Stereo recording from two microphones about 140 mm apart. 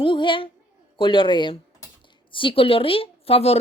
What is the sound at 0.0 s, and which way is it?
A woman's voice, 35° left (ahead or behind).